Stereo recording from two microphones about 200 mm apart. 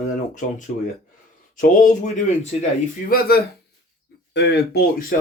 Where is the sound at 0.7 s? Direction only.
40° left (ahead or behind).